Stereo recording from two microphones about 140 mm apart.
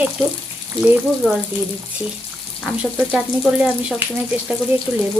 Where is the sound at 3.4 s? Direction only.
5° right (ahead or behind).